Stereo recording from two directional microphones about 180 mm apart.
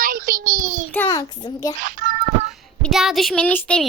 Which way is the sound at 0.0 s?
50° right (ahead or behind).